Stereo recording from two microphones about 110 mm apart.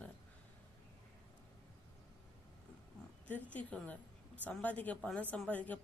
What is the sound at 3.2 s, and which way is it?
Speech, 15° left (ahead or behind).